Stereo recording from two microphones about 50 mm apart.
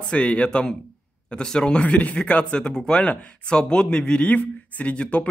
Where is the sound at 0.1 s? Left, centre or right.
Left.